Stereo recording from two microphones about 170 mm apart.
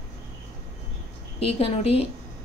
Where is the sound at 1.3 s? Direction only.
35° left (ahead or behind).